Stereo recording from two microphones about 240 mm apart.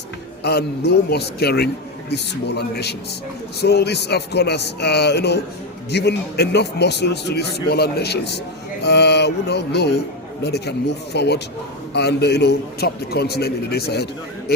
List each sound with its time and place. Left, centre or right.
0.4 s a man's voice: left
8.8 s mantra: left
10.4 s a man's voice: left